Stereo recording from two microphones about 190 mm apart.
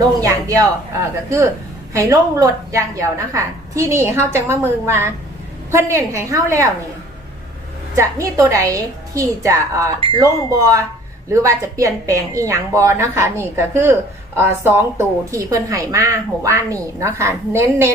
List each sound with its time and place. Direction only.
0.2 s speech: 20° right (ahead or behind)
1.9 s a woman's voice: 15° right (ahead or behind)
7.9 s a woman's voice: 15° right (ahead or behind)